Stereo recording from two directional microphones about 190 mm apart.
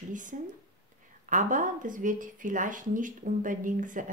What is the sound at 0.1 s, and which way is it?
Speech, 40° right (ahead or behind).